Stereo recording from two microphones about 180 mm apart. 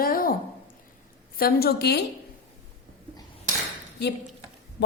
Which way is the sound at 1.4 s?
60° left (ahead or behind).